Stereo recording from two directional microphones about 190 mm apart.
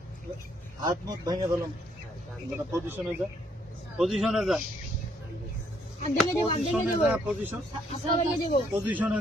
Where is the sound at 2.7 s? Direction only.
10° right (ahead or behind).